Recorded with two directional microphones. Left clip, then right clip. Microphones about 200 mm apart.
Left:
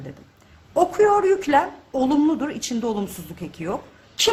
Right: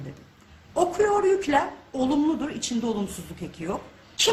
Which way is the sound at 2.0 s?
35° left (ahead or behind).